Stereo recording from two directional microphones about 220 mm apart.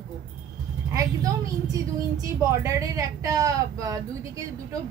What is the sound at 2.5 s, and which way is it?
Speech, 15° right (ahead or behind).